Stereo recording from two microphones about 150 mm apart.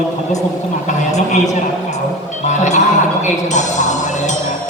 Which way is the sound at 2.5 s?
55° left (ahead or behind).